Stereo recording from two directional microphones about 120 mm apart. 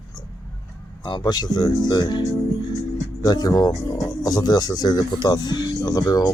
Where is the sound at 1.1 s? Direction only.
35° left (ahead or behind).